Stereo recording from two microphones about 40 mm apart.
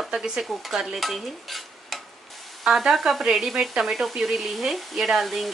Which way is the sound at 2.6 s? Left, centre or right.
Centre.